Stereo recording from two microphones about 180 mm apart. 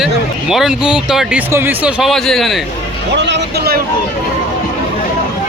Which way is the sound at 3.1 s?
75° right (ahead or behind).